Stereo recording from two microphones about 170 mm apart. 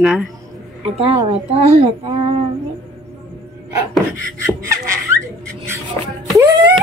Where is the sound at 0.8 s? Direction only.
35° right (ahead or behind).